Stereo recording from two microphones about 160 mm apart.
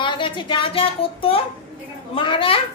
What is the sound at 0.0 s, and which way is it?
A woman's voice, 30° left (ahead or behind).